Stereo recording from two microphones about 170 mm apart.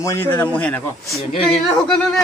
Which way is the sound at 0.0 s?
15° left (ahead or behind).